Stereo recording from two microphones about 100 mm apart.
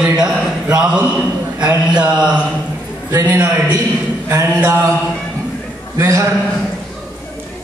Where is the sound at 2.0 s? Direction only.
10° right (ahead or behind).